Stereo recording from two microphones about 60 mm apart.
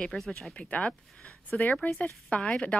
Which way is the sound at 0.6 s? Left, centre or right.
Left.